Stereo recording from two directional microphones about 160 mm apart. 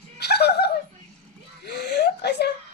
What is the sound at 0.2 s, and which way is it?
Chuckle, 90° left.